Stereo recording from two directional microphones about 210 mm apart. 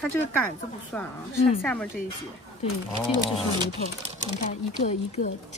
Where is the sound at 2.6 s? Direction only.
30° left (ahead or behind).